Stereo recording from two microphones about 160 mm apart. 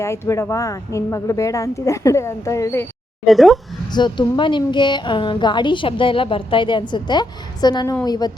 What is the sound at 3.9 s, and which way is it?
A woman's voice, 30° left (ahead or behind).